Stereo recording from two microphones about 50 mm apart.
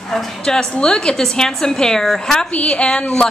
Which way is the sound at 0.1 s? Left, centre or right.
Centre.